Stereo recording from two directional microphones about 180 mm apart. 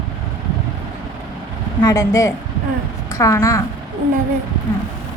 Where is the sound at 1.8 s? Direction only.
15° left (ahead or behind).